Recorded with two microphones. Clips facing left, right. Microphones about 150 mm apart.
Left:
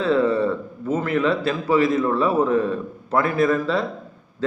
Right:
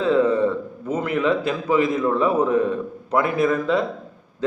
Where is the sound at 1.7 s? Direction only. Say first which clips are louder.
Left 1 dB; 15° right (ahead or behind).